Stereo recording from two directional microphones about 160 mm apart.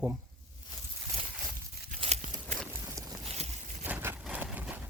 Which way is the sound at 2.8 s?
20° right (ahead or behind).